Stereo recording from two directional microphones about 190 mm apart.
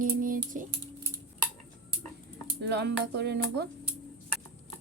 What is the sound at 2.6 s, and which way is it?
Music, 60° right (ahead or behind).